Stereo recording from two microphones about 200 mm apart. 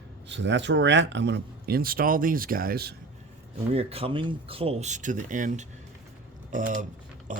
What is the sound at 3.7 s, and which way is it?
Speech, 30° right (ahead or behind).